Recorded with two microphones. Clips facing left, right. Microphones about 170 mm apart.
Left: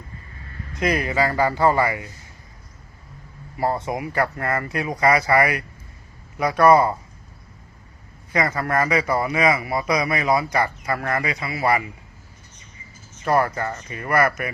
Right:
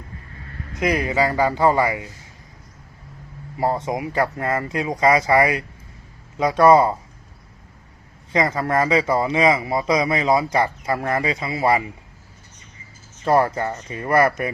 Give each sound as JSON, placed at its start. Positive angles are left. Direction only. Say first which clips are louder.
{"t": 0.8, "sound": "speech", "louder": "right 1 dB", "side_deg": -15}
{"t": 3.6, "sound": "a man's voice", "louder": "right 2 dB", "side_deg": -20}
{"t": 8.3, "sound": "a man's voice", "louder": "right 2 dB", "side_deg": -20}
{"t": 13.2, "sound": "a man's voice", "louder": "right 2 dB", "side_deg": -25}